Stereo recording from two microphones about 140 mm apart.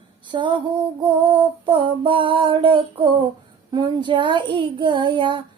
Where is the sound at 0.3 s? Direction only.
35° right (ahead or behind).